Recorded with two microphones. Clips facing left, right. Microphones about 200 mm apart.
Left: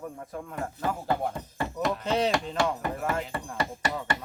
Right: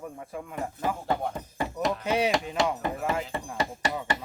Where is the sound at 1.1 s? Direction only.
5° left (ahead or behind).